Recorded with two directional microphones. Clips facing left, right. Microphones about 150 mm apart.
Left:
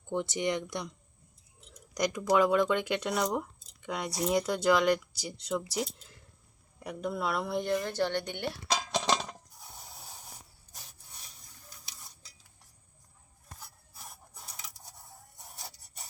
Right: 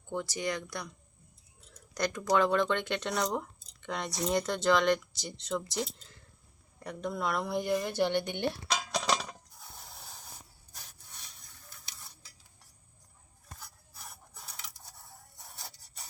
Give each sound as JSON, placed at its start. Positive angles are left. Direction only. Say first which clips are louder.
{"t": 0.1, "sound": "a woman's voice", "louder": "left 3 dB", "side_deg": 20}
{"t": 8.6, "sound": "dishes", "louder": "left 2 dB", "side_deg": 30}
{"t": 9.8, "sound": "a sound", "louder": "left 1 dB", "side_deg": 10}